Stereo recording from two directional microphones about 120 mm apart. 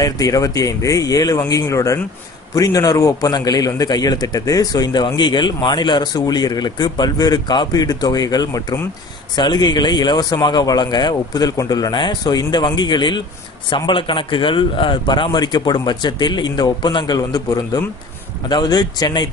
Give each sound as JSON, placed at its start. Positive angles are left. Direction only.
{"t": 0.0, "sound": "a man's voice", "side_deg": 30}